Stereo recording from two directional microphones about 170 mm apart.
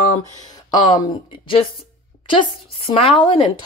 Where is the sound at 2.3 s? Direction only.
30° left (ahead or behind).